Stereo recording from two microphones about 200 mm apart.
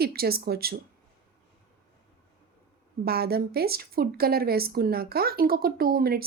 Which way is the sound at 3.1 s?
50° right (ahead or behind).